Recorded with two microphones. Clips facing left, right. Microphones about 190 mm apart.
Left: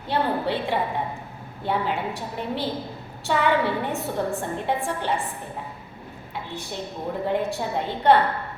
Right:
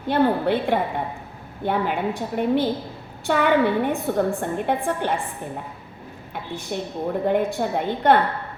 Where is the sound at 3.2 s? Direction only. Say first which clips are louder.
Right 3 dB; 55° right (ahead or behind).